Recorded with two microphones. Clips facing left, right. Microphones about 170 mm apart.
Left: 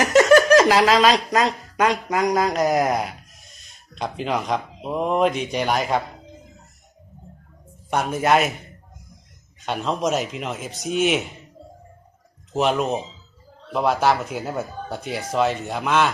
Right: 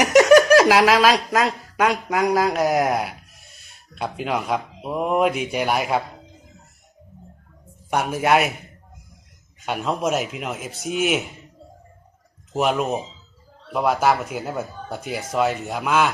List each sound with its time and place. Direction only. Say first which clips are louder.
0.0 s a sound: right 1 dB; 15° right (ahead or behind)
0.5 s speech: right 1 dB; 10° right (ahead or behind)
7.9 s speech: even; 5° right (ahead or behind)
9.6 s speech: even; 10° right (ahead or behind)
12.5 s speech: even; centre (ahead or behind)